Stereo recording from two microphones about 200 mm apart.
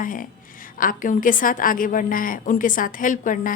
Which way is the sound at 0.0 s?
45° left (ahead or behind).